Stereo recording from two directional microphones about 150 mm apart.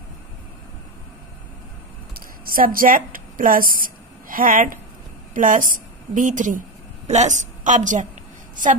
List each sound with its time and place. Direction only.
2.1 s a woman's voice: 75° right (ahead or behind); by 8.1 s 55° right (ahead or behind)